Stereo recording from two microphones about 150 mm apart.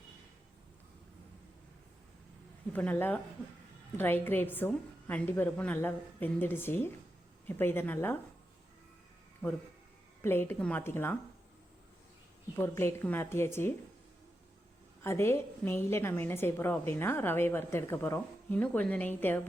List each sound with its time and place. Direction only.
2.7 s a woman's voice: 10° left (ahead or behind)
10.2 s a woman's voice: 15° left (ahead or behind)
12.5 s a woman's voice: 15° left (ahead or behind)
15.0 s a woman's voice: 15° left (ahead or behind)